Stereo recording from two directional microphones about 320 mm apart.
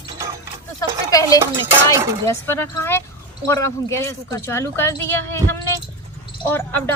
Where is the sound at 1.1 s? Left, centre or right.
Centre.